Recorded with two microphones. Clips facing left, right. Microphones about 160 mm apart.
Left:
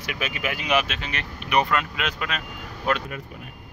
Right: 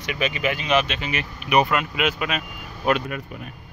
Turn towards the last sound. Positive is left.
turn(degrees=-15)  # may be behind; listen again after turning